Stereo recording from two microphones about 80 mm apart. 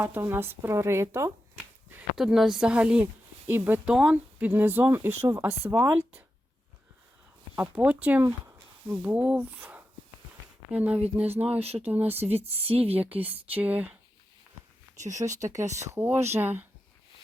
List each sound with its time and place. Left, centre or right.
0.0 s speech: right
2.1 s speech: centre
3.4 s speech: right
3.8 s speech: centre; by 6.1 s right
7.5 s speech: right
15.2 s speech: right
16.0 s speech: right